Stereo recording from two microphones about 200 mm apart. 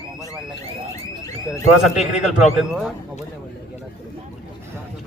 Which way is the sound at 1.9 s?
35° left (ahead or behind).